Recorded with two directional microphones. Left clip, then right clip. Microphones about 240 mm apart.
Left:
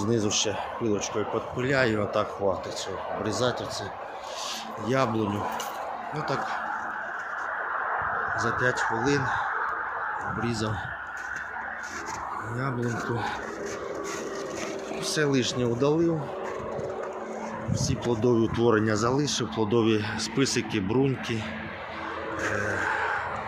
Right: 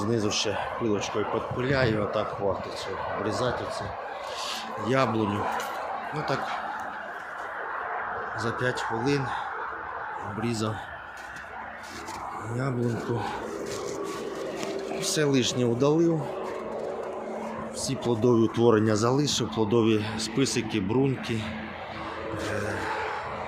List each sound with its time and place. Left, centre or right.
0.0 s speech: centre
3.2 s speech: centre
4.9 s speech: centre
8.4 s speech: centre
12.6 s speech: centre
15.0 s speech: centre
17.8 s speech: centre
22.6 s a sound: centre